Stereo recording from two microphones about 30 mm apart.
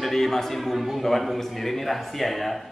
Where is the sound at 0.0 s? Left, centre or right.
Centre.